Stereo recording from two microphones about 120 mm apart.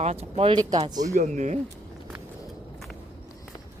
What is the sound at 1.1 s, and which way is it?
Speech, 85° right.